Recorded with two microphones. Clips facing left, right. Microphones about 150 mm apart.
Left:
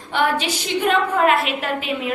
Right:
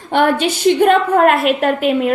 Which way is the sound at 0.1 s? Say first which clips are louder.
Right 6 dB; 50° right (ahead or behind).